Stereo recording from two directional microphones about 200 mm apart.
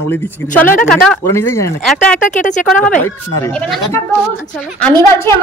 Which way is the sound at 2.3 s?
35° left (ahead or behind).